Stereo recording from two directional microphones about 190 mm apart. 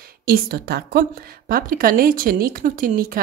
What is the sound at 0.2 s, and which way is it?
Speech, 50° right (ahead or behind).